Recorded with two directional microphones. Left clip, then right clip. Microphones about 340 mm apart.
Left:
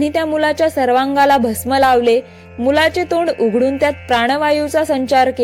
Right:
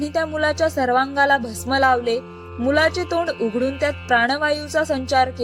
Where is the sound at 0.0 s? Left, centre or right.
Centre.